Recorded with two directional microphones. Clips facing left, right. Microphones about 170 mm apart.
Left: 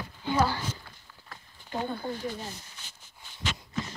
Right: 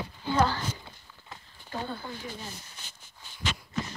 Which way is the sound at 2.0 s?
40° left (ahead or behind).